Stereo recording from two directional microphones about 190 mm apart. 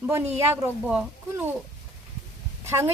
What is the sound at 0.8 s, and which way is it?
Speech, 10° right (ahead or behind).